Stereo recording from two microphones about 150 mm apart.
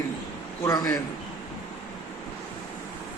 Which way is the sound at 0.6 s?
25° left (ahead or behind).